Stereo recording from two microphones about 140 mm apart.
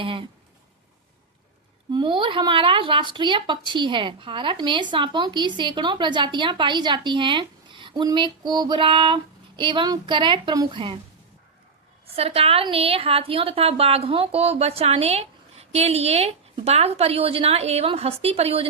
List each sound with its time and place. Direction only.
0.0 s a woman's voice: 40° right (ahead or behind)
1.9 s a woman's voice: 35° right (ahead or behind)
12.1 s a woman's voice: 45° right (ahead or behind)